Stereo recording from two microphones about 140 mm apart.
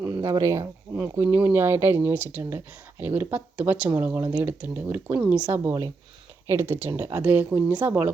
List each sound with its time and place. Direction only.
0.0 s speech: 25° right (ahead or behind)